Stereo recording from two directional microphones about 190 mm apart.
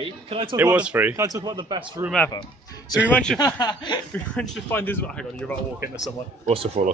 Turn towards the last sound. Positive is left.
turn(degrees=-30)  # may be behind; listen again after turning